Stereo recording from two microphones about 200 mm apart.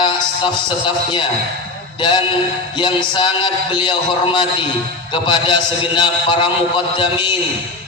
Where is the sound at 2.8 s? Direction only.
25° left (ahead or behind).